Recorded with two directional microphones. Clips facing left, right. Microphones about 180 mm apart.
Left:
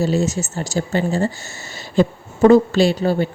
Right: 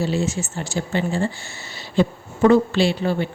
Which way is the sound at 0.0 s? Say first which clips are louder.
Left 4 dB; 40° left (ahead or behind).